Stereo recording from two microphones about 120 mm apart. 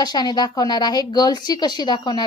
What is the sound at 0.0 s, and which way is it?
A woman's voice, 35° left (ahead or behind).